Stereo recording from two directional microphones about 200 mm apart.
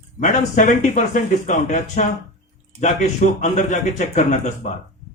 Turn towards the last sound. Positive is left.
turn(degrees=35)  # may be behind; listen again after turning